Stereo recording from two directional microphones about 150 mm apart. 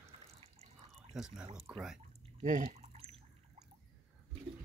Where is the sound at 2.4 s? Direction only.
55° right (ahead or behind).